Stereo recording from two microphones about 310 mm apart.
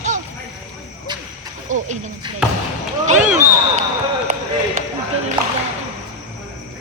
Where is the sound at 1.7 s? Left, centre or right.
Right.